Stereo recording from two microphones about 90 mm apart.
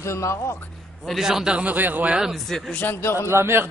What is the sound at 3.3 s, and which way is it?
Speech, 25° right (ahead or behind).